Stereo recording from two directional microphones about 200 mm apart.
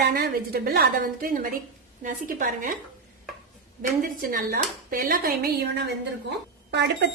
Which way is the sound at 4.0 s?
45° right (ahead or behind).